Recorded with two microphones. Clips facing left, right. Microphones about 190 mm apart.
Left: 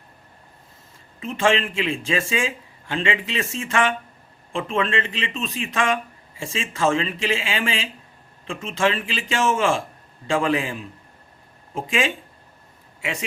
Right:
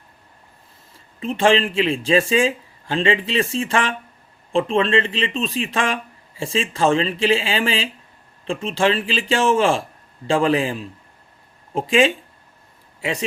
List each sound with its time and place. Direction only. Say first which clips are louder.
1.2 s speech: right 4 dB; 35° right (ahead or behind)